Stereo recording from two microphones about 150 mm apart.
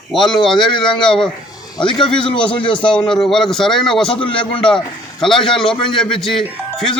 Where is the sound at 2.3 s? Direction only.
35° left (ahead or behind).